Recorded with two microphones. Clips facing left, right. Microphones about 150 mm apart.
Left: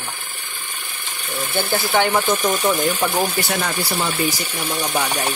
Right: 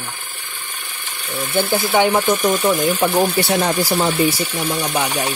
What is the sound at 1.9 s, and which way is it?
Speech, 20° right (ahead or behind).